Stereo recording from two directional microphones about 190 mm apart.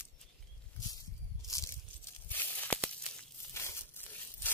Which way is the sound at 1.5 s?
15° left (ahead or behind).